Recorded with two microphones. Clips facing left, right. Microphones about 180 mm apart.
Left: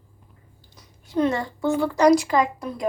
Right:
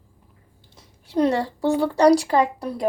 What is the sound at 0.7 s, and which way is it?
A woman's voice, 30° right (ahead or behind).